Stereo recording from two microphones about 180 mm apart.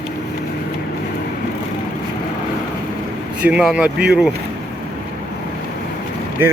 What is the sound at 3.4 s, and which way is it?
Speech, 5° right (ahead or behind).